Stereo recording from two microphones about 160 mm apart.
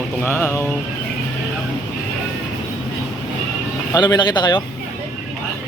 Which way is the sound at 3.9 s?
25° left (ahead or behind).